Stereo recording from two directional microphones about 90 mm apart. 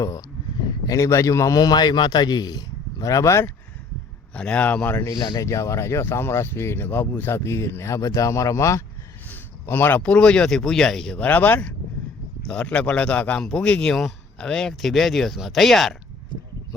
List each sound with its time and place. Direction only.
0.0 s a man's voice: 40° left (ahead or behind)
4.4 s speech: 15° left (ahead or behind)
5.1 s speech: 60° left (ahead or behind)
5.4 s speech: 35° left (ahead or behind)
9.3 s speech: 25° left (ahead or behind); by 16.0 s 5° left (ahead or behind)